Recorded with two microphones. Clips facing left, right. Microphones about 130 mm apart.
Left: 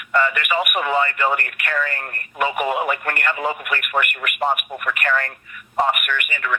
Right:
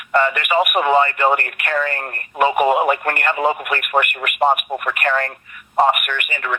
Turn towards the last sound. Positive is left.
turn(degrees=-25)  # may be behind; listen again after turning